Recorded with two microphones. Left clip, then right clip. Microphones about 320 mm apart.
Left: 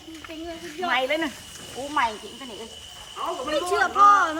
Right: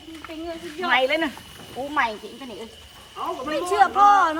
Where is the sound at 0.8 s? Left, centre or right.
Centre.